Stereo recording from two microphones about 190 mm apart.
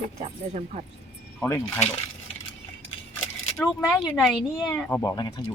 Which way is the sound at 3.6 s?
Centre (ahead or behind).